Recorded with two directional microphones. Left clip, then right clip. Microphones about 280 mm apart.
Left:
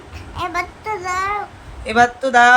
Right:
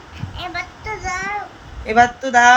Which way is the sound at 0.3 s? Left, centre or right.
Centre.